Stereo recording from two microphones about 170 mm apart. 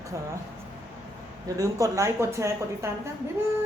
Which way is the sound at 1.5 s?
20° right (ahead or behind).